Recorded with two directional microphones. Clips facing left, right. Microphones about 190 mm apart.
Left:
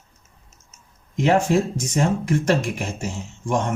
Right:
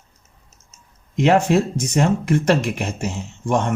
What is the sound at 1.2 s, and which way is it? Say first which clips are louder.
Speech: right 2 dB; 70° right (ahead or behind).